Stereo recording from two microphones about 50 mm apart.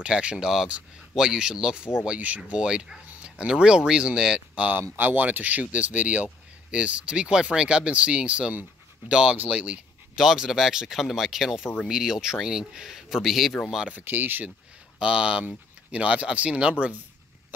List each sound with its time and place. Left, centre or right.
0.0 s speech: right
2.0 s speech: right
4.7 s speech: right
10.1 s speech: centre
14.0 s speech: right
15.0 s speech: centre